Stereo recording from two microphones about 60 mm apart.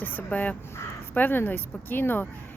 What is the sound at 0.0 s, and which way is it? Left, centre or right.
Crow, left.